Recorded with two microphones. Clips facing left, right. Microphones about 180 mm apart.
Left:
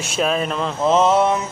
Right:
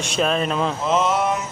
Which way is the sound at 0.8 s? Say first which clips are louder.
Left 7 dB; 30° left (ahead or behind).